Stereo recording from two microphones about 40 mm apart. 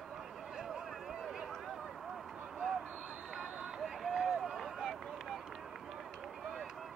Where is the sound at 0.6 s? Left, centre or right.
Centre.